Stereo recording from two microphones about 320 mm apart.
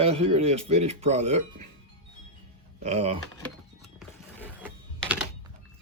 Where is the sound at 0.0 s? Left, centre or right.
Centre.